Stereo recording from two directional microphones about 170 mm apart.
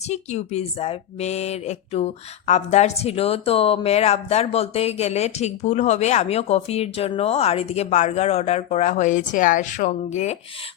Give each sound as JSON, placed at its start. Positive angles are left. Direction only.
{"t": 0.0, "sound": "speech", "side_deg": 40}